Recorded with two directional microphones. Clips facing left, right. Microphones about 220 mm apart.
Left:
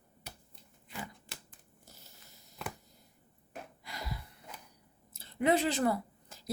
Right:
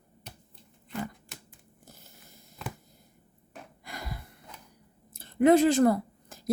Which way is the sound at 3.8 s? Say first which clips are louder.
Right 3 dB; 50° right (ahead or behind).